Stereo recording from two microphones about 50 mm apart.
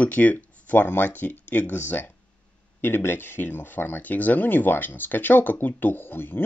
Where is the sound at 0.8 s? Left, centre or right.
Left.